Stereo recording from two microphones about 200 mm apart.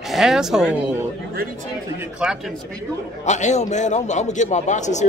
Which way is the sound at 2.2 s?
5° right (ahead or behind).